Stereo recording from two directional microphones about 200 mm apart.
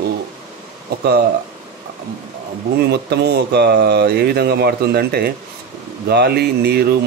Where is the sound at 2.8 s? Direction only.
55° right (ahead or behind).